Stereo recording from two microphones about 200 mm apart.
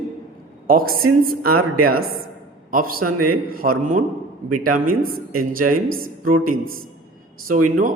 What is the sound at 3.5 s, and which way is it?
Speech, 45° right (ahead or behind).